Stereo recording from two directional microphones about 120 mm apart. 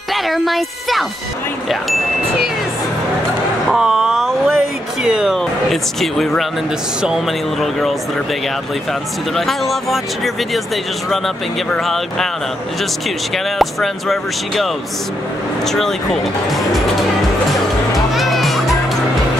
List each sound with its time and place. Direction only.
0.1 s speech: centre (ahead or behind)
3.7 s a sound: 5° right (ahead or behind)
5.0 s speech: 5° right (ahead or behind)
9.3 s speech: centre (ahead or behind)
13.6 s speech: centre (ahead or behind)
17.5 s music: centre (ahead or behind)